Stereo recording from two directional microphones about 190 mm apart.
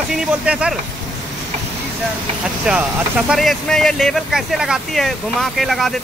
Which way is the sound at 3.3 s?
Centre (ahead or behind).